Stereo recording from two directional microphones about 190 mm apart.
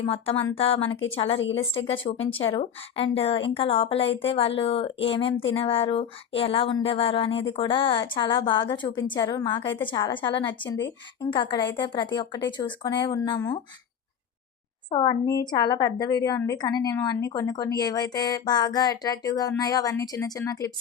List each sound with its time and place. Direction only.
0.0 s a woman's voice: 30° left (ahead or behind)
14.8 s a woman's voice: 25° left (ahead or behind)